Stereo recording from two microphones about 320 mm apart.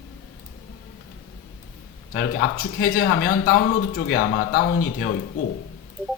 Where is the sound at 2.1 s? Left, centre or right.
Left.